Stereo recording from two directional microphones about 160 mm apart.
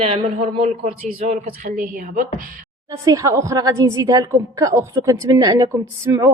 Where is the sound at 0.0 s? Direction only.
35° right (ahead or behind).